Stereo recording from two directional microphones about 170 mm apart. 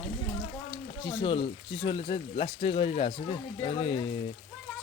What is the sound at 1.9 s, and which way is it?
Speech, 35° left (ahead or behind).